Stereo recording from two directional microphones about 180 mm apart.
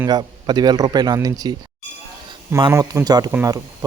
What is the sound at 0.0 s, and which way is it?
Speech, 25° right (ahead or behind).